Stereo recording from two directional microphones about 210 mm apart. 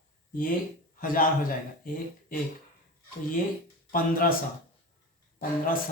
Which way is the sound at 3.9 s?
45° left (ahead or behind).